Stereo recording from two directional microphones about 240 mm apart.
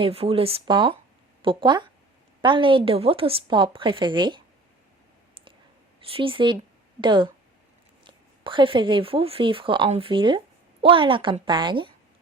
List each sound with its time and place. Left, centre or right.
0.0 s speech: right
6.1 s speech: right